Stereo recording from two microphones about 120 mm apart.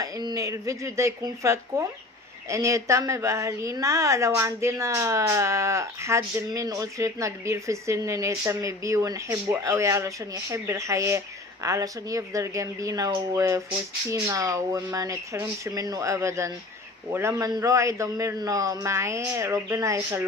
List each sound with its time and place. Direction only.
0.0 s a woman's voice: 30° right (ahead or behind)